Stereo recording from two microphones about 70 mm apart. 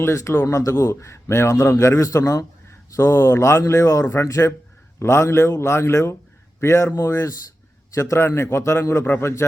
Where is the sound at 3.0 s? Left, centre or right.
Left.